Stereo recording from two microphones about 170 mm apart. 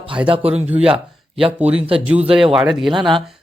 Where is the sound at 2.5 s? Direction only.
Centre (ahead or behind).